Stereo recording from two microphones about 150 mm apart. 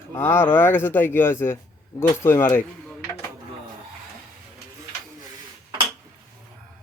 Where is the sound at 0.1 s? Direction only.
15° left (ahead or behind).